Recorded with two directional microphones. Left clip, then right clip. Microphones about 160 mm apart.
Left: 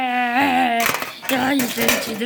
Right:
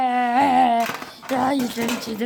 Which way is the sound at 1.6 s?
20° right (ahead or behind).